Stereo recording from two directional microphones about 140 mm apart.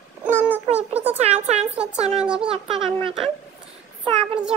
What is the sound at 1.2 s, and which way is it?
Child singing, 50° right (ahead or behind).